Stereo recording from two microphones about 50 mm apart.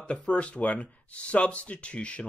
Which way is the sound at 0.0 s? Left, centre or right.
Left.